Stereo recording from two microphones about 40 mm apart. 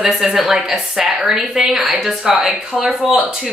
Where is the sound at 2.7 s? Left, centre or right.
Centre.